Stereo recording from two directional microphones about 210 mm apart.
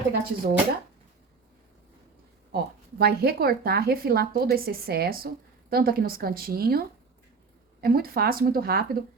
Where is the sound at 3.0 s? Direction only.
50° right (ahead or behind).